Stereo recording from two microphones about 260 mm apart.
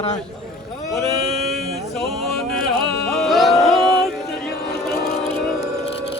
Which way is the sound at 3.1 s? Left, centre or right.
Centre.